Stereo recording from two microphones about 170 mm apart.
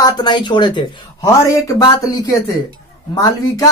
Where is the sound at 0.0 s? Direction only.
25° left (ahead or behind).